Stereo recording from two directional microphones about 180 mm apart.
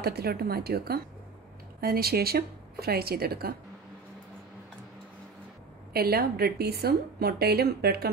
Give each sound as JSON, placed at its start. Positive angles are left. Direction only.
{"t": 0.0, "sound": "a woman's voice", "side_deg": -60}
{"t": 5.9, "sound": "a woman's voice", "side_deg": -60}